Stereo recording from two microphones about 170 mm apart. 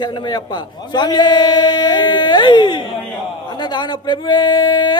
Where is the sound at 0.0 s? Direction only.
25° left (ahead or behind).